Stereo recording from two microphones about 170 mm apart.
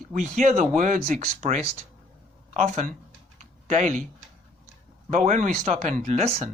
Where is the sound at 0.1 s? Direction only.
45° right (ahead or behind).